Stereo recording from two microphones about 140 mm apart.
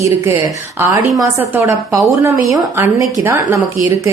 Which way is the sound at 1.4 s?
20° right (ahead or behind).